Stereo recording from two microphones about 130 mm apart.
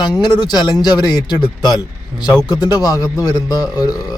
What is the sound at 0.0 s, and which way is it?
Speech, 35° left (ahead or behind).